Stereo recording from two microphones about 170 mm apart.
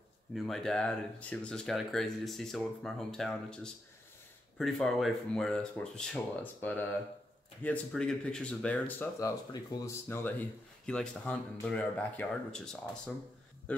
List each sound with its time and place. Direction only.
0.3 s speech: centre (ahead or behind)
9.5 s speech: 25° left (ahead or behind)
10.0 s speech: 10° left (ahead or behind)
13.7 s a sound: 5° left (ahead or behind)